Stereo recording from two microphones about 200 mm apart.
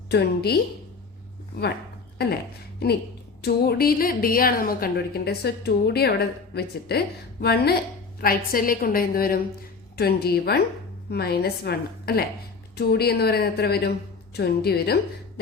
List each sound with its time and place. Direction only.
0.1 s a woman's voice: 55° left (ahead or behind)
3.4 s a woman's voice: 50° left (ahead or behind)